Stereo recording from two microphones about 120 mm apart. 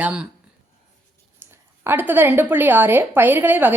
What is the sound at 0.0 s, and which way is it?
Speech, 10° right (ahead or behind).